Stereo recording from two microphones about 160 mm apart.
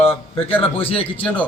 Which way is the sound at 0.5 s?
35° left (ahead or behind).